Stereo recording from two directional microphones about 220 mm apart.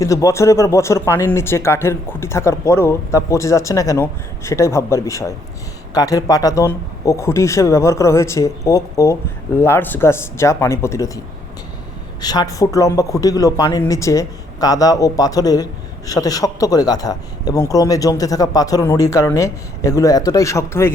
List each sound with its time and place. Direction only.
0.0 s a man's voice: 15° left (ahead or behind)
12.2 s a man's voice: 15° left (ahead or behind)